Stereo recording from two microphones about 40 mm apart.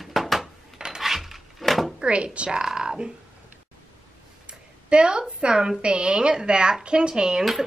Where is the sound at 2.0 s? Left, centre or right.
Right.